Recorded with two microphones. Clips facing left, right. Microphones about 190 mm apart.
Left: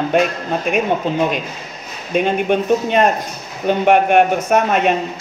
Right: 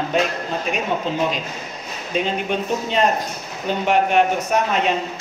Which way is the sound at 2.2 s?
55° left (ahead or behind).